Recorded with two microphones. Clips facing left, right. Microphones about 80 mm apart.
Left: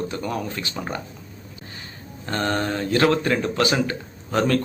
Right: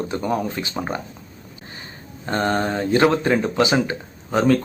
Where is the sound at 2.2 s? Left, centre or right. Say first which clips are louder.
Right 3 dB; right.